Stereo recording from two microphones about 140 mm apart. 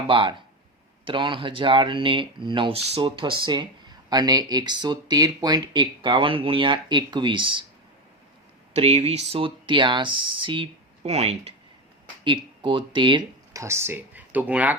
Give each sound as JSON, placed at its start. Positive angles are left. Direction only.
{"t": 0.1, "sound": "speech", "side_deg": -35}
{"t": 8.7, "sound": "speech", "side_deg": -45}
{"t": 11.0, "sound": "speech", "side_deg": -50}
{"t": 12.2, "sound": "speech", "side_deg": -35}
{"t": 13.5, "sound": "speech", "side_deg": -20}